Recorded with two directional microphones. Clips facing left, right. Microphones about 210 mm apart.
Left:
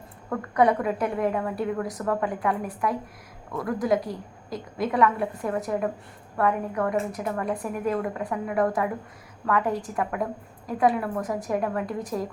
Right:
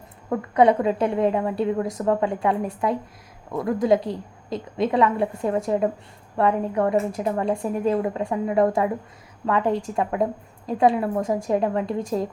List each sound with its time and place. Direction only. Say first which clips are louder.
0.3 s a woman's voice: right 4 dB; 20° right (ahead or behind)